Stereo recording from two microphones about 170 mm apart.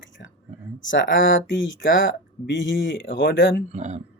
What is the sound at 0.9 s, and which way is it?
Speech, 90° left.